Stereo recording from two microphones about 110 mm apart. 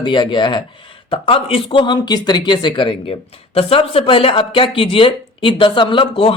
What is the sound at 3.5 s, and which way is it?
Speech, 60° left (ahead or behind).